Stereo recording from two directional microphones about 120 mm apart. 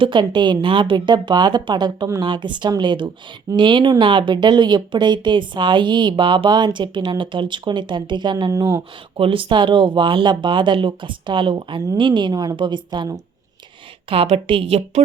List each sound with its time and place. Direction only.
0.0 s speech: 40° right (ahead or behind)
9.1 s speech: 50° right (ahead or behind)
14.3 s speech: 55° right (ahead or behind)